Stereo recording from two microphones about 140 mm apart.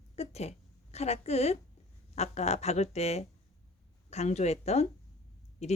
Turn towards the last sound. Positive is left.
turn(degrees=50)  # may be behind; listen again after turning